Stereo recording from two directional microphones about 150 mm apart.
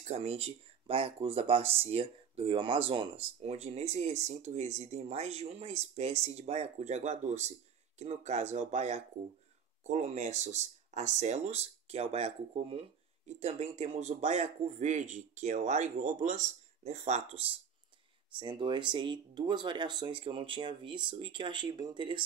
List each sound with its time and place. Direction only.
0.0 s speech: 45° right (ahead or behind)